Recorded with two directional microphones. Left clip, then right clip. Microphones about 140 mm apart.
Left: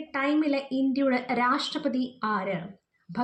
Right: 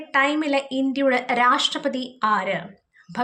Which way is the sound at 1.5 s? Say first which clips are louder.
Right 7 dB; 50° right (ahead or behind).